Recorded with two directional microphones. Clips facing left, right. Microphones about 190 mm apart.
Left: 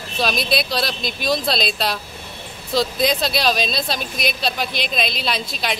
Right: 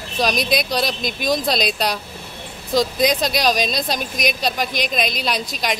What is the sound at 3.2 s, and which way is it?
Speech, 15° right (ahead or behind).